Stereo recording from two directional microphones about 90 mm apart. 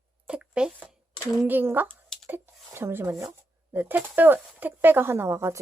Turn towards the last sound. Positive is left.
turn(degrees=-30)  # may be behind; listen again after turning